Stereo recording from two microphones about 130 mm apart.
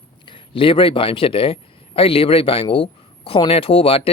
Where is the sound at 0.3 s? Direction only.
40° left (ahead or behind).